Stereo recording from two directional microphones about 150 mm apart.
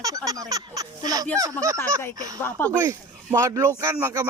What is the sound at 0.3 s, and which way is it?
Speech, 25° right (ahead or behind).